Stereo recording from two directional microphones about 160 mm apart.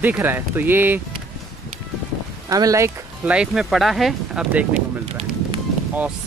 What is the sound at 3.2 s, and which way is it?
Speech, 5° right (ahead or behind).